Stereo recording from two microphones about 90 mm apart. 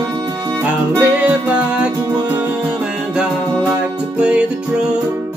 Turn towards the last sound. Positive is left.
turn(degrees=-10)  # may be behind; listen again after turning